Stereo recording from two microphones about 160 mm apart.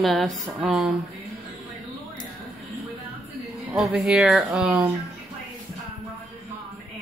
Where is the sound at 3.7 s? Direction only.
5° right (ahead or behind).